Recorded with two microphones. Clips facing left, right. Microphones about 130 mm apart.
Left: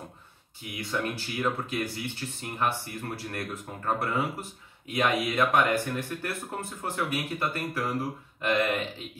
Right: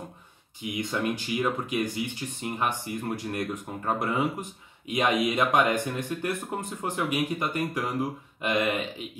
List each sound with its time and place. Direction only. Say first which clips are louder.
0.6 s speech: right 3 dB; 20° right (ahead or behind)